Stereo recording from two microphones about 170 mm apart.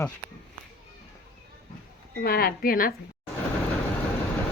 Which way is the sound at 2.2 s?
65° left (ahead or behind).